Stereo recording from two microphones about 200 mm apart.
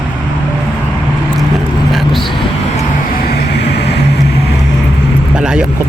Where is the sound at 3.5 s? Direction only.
55° left (ahead or behind).